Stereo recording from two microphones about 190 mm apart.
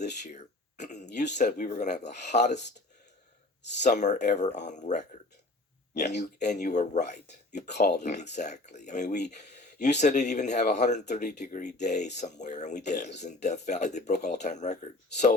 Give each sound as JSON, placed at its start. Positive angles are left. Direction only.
{"t": 0.0, "sound": "a sound", "side_deg": 40}
{"t": 1.4, "sound": "speech", "side_deg": 40}
{"t": 3.8, "sound": "speech", "side_deg": 40}
{"t": 6.1, "sound": "speech", "side_deg": 40}
{"t": 9.3, "sound": "a sound", "side_deg": 40}
{"t": 10.0, "sound": "speech", "side_deg": 40}